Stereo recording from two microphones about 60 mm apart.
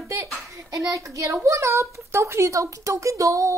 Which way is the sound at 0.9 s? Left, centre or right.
Right.